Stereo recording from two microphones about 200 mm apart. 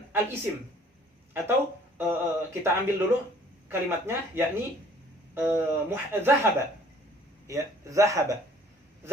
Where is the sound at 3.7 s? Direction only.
10° right (ahead or behind).